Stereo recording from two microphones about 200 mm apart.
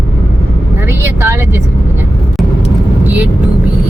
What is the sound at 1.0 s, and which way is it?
Vehicle, 15° right (ahead or behind).